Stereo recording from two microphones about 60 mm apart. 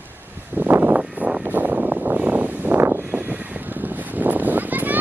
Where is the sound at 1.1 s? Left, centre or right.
Centre.